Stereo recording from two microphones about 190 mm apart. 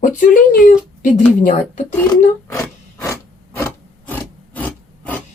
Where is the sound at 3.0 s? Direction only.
15° left (ahead or behind).